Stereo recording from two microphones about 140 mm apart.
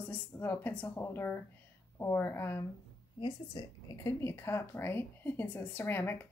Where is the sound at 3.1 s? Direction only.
30° left (ahead or behind).